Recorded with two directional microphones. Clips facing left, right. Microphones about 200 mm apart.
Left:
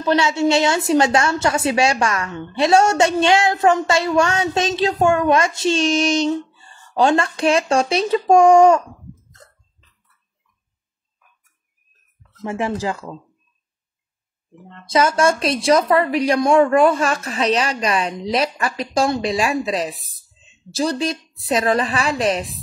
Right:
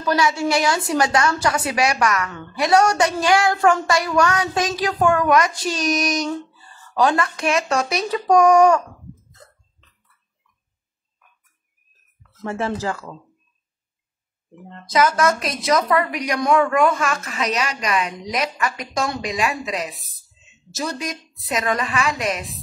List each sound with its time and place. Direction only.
0.0 s a woman's voice: 25° left (ahead or behind)
12.4 s speech: 15° left (ahead or behind)
14.9 s a woman's voice: 25° left (ahead or behind)